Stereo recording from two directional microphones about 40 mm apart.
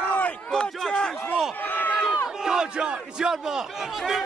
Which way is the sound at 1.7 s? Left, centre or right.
Left.